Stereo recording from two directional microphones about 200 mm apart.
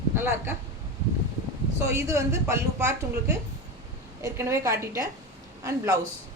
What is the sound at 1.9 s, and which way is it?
A woman's voice, 15° right (ahead or behind).